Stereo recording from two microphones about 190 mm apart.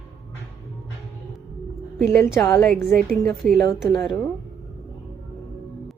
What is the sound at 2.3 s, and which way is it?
Speech, 15° left (ahead or behind).